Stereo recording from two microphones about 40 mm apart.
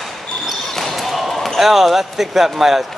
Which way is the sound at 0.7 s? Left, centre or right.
Centre.